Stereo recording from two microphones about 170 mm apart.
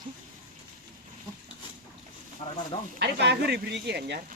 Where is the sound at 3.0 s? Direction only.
80° right.